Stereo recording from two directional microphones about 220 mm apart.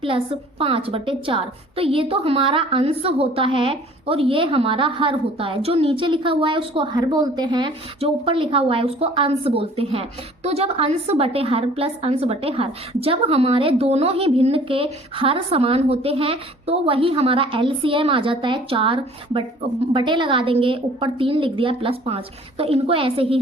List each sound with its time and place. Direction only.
0.6 s a woman's voice: 25° right (ahead or behind)